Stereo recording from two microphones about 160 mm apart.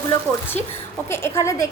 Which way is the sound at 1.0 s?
15° left (ahead or behind).